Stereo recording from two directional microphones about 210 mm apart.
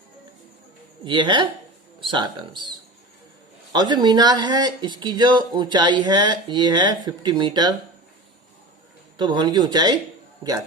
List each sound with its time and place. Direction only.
1.0 s speech: 20° right (ahead or behind)
9.1 s speech: 20° right (ahead or behind)